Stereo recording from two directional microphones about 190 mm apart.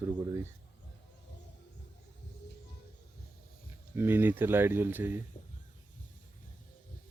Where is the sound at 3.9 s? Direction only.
10° right (ahead or behind).